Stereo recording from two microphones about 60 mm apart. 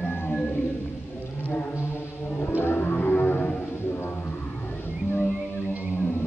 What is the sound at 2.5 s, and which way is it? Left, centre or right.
Music, left.